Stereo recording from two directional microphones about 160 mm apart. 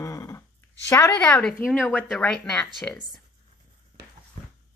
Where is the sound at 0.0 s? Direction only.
20° left (ahead or behind).